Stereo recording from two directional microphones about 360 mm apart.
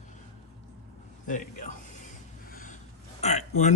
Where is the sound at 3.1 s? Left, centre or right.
Centre.